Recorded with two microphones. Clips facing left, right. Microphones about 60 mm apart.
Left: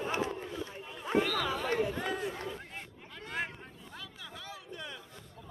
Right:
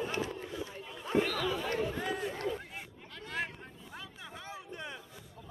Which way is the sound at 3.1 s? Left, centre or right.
Centre.